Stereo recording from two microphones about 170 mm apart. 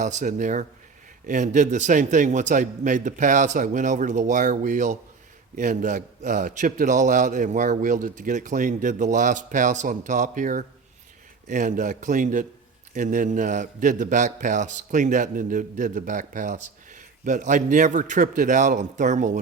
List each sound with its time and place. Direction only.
0.0 s a man's voice: 45° right (ahead or behind)